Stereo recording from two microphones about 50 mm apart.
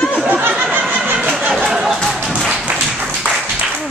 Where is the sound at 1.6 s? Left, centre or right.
Centre.